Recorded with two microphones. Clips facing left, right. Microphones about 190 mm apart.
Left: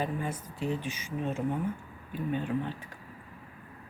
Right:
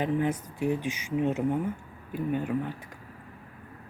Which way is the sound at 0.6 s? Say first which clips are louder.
Right 4 dB; 15° right (ahead or behind).